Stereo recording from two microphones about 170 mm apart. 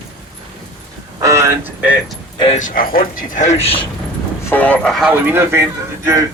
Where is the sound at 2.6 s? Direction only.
55° left (ahead or behind); by 3.8 s 35° left (ahead or behind).